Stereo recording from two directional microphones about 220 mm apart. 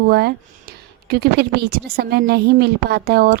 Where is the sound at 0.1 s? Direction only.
45° right (ahead or behind).